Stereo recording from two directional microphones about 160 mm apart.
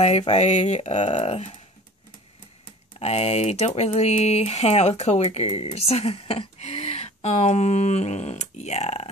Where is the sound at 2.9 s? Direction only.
40° left (ahead or behind).